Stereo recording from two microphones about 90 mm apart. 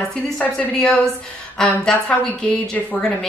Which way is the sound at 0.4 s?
10° left (ahead or behind).